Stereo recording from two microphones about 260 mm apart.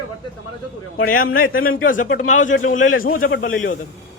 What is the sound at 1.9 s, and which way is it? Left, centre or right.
A man's voice, left.